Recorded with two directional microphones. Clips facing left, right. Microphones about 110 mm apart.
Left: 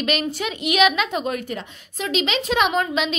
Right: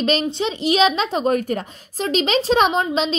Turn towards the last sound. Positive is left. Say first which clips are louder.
# right 2 dB
turn(degrees=-30)  # may be behind; listen again after turning